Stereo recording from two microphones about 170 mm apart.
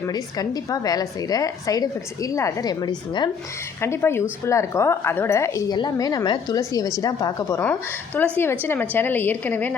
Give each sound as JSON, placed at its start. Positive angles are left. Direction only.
{"t": 0.1, "sound": "a woman's voice", "side_deg": 20}
{"t": 3.8, "sound": "a woman's voice", "side_deg": 15}